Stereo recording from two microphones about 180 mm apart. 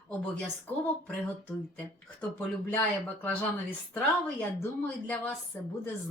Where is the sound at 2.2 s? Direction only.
10° left (ahead or behind).